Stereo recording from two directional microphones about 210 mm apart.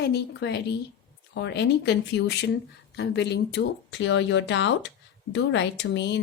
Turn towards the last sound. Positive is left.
turn(degrees=55)  # may be behind; listen again after turning